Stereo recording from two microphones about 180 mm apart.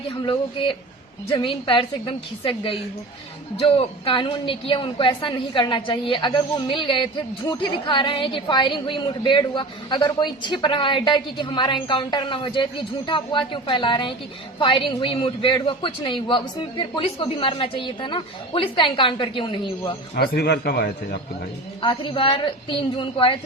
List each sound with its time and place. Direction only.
0.2 s a woman's voice: 30° left (ahead or behind)
20.1 s a man's voice: 60° left (ahead or behind)
21.8 s a woman's voice: 25° left (ahead or behind)